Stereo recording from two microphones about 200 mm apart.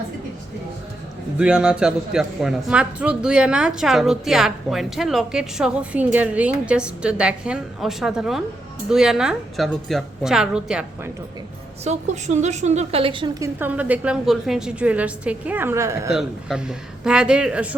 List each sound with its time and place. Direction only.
1.4 s a man's voice: 5° right (ahead or behind)
11.9 s a woman's voice: 35° right (ahead or behind)
13.6 s a woman's voice: 10° right (ahead or behind)
16.0 s a man's voice: centre (ahead or behind)